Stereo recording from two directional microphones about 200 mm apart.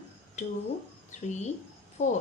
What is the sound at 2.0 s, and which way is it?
Speech, 40° left (ahead or behind).